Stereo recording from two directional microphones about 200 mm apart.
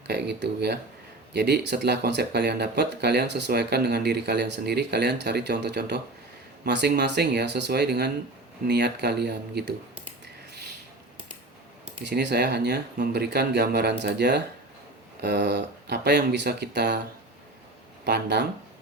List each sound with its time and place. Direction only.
0.1 s speech: 55° right (ahead or behind)
12.0 s speech: 55° right (ahead or behind)
18.0 s speech: 55° right (ahead or behind)